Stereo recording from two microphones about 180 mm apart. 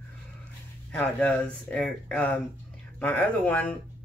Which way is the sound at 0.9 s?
10° left (ahead or behind).